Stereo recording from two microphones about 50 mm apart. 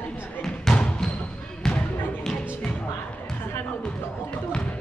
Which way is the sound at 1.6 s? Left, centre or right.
Centre.